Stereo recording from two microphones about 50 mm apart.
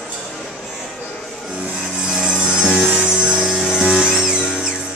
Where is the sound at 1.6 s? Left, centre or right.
Centre.